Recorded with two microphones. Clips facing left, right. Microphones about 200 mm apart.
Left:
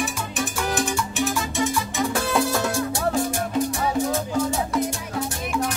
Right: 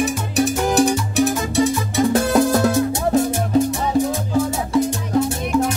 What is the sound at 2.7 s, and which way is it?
Music, 20° right (ahead or behind).